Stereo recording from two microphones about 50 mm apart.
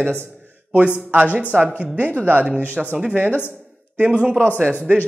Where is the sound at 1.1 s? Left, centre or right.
Right.